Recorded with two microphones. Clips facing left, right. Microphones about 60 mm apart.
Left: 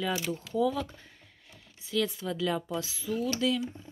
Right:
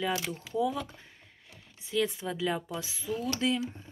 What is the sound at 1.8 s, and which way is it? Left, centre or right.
Speech, right.